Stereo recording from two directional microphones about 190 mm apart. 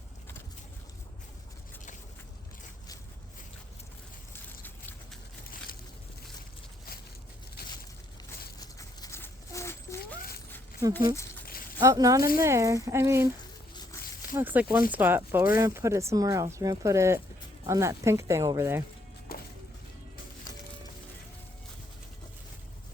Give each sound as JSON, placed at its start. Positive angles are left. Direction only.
{"t": 8.6, "sound": "a sound", "side_deg": 20}
{"t": 11.8, "sound": "speech", "side_deg": -20}
{"t": 14.3, "sound": "speech", "side_deg": -10}
{"t": 19.3, "sound": "music", "side_deg": 50}